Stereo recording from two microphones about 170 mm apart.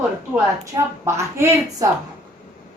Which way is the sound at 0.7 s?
20° right (ahead or behind).